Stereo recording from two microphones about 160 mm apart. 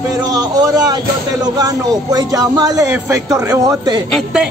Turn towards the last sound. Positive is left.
turn(degrees=-5)  # may be behind; listen again after turning